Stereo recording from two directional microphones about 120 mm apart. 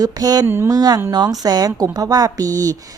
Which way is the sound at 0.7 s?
35° right (ahead or behind).